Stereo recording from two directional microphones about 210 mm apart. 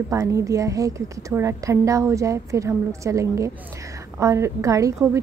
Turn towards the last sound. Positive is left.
turn(degrees=-15)  # may be behind; listen again after turning